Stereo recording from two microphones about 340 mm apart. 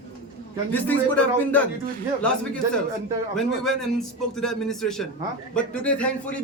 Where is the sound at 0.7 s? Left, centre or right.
Centre.